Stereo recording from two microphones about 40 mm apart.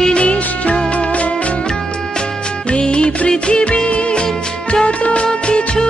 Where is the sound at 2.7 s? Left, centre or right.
Left.